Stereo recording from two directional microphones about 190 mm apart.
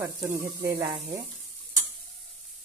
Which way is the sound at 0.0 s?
15° right (ahead or behind).